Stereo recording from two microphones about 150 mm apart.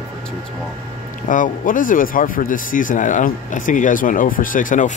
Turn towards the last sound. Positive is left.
turn(degrees=60)  # may be behind; listen again after turning